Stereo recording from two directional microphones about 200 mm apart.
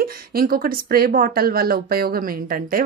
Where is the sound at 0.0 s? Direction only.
45° right (ahead or behind).